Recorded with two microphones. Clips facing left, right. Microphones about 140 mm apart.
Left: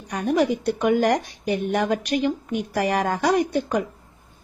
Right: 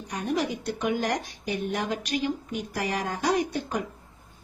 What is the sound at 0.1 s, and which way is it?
A woman's voice, 55° left (ahead or behind).